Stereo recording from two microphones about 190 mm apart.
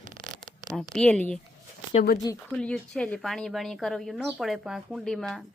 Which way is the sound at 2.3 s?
20° left (ahead or behind).